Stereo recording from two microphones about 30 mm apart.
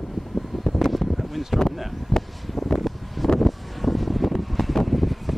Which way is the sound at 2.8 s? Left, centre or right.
Centre.